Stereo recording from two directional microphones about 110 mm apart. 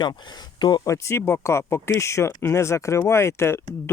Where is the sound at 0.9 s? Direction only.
25° left (ahead or behind).